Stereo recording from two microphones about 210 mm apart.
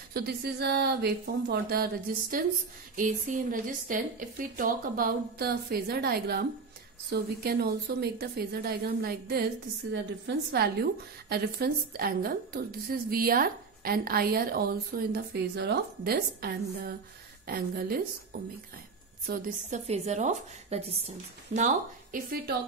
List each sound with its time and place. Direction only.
0.1 s a woman's voice: 50° right (ahead or behind)
3.0 s a woman's voice: 40° right (ahead or behind)
19.9 s a woman's voice: 35° right (ahead or behind)